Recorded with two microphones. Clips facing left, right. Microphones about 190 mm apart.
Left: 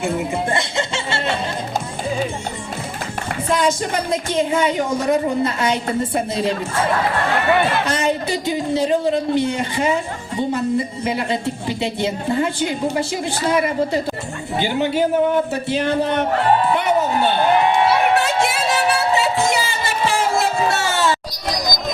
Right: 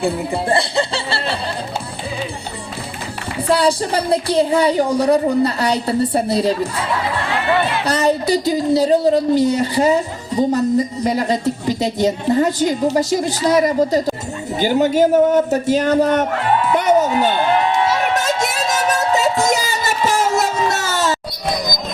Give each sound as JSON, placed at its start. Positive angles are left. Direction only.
{"t": 0.0, "sound": "music", "side_deg": -35}
{"t": 3.5, "sound": "a woman's voice", "side_deg": -35}
{"t": 7.9, "sound": "a woman's voice", "side_deg": -40}
{"t": 16.7, "sound": "a sound", "side_deg": -40}
{"t": 17.8, "sound": "music", "side_deg": -40}